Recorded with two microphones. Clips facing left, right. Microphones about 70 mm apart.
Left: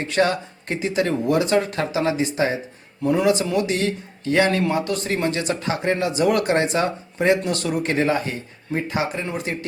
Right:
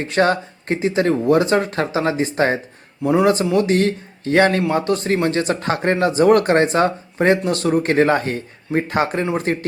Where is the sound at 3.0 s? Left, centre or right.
Centre.